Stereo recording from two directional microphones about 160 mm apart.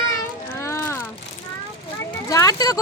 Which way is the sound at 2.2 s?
25° left (ahead or behind).